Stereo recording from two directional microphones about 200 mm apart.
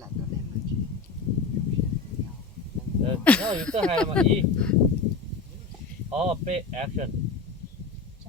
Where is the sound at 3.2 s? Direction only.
5° left (ahead or behind).